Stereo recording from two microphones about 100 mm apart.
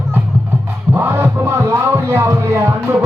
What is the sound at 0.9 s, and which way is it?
Music, 20° right (ahead or behind).